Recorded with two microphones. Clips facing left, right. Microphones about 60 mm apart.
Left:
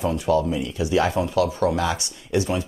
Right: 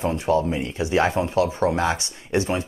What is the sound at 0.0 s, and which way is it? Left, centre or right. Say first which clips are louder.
Speech: even; right.